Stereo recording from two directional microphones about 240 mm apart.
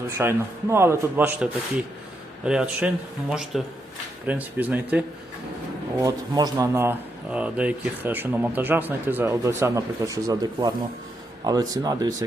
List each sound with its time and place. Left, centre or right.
0.2 s speech: centre